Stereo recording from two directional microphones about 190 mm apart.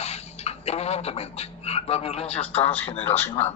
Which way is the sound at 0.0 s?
35° left (ahead or behind).